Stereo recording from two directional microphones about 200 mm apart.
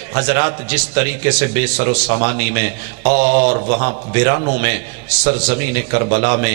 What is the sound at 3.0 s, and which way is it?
Mantra, 40° right (ahead or behind).